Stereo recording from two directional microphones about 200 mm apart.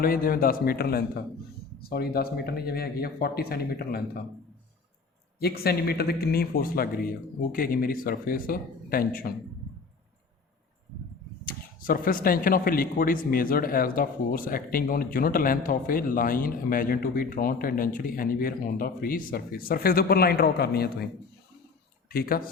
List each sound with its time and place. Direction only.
0.0 s speech: 45° left (ahead or behind)
5.4 s speech: 50° left (ahead or behind)
11.4 s speech: 45° left (ahead or behind)
22.1 s speech: 45° left (ahead or behind)